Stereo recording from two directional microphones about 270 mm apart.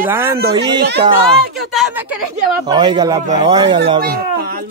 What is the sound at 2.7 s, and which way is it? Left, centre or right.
Speech, centre.